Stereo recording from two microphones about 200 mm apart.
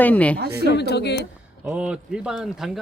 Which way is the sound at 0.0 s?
10° left (ahead or behind).